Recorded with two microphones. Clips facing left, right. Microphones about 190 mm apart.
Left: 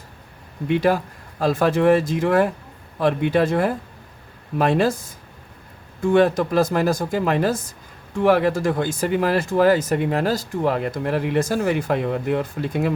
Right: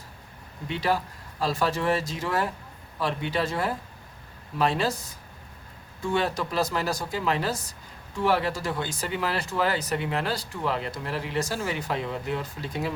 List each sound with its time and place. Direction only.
0.7 s speech: 50° left (ahead or behind)